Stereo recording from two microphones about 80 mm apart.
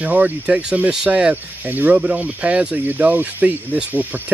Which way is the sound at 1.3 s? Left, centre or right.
Right.